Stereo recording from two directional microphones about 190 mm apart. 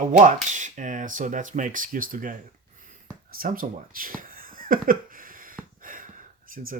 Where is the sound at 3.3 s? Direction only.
50° right (ahead or behind).